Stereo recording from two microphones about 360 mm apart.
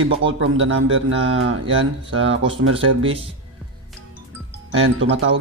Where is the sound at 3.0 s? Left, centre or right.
Centre.